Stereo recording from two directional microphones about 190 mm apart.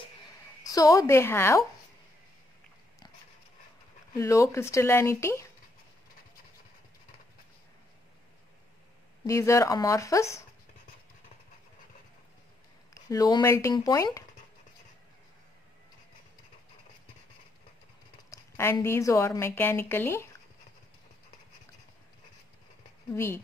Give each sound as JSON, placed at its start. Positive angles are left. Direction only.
{"t": 0.7, "sound": "a woman's voice", "side_deg": 20}
{"t": 4.2, "sound": "a woman's voice", "side_deg": 15}
{"t": 9.2, "sound": "a woman's voice", "side_deg": 15}
{"t": 12.9, "sound": "a woman's voice", "side_deg": 20}
{"t": 18.3, "sound": "a woman's voice", "side_deg": 15}
{"t": 23.1, "sound": "a woman's voice", "side_deg": 10}